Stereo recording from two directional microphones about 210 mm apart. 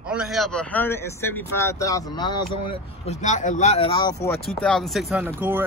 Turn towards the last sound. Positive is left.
turn(degrees=-10)  # may be behind; listen again after turning